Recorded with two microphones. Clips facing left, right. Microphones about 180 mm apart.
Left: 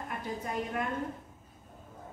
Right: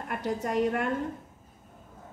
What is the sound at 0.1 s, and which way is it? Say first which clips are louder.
Speech: right 8 dB; 75° right (ahead or behind).